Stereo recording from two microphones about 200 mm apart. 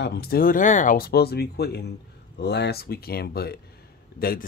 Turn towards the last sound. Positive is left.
turn(degrees=50)  # may be behind; listen again after turning